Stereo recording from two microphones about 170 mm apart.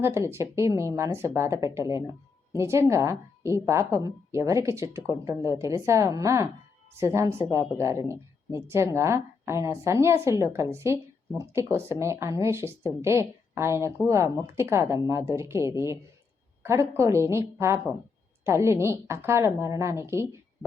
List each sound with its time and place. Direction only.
0.0 s a woman's voice: 15° right (ahead or behind)